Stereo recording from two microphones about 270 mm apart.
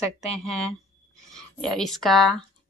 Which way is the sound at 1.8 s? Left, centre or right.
Centre.